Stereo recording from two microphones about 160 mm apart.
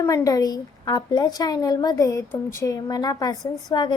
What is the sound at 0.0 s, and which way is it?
Speech, 20° left (ahead or behind).